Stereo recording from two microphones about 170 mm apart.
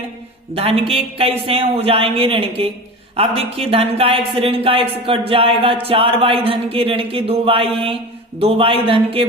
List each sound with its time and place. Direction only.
0.5 s speech: 35° right (ahead or behind)
3.7 s speech: 35° right (ahead or behind)